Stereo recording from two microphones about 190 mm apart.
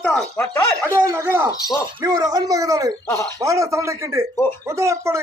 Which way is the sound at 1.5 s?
20° left (ahead or behind).